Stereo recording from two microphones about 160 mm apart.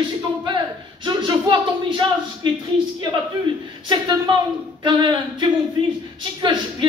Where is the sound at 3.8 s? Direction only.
30° right (ahead or behind).